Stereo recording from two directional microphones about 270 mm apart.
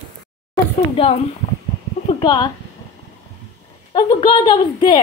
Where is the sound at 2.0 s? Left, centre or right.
Centre.